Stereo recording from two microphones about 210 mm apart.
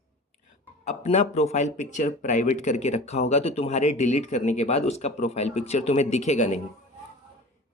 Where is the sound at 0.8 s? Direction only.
30° left (ahead or behind).